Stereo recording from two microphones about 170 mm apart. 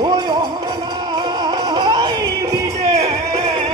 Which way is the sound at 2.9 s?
40° right (ahead or behind).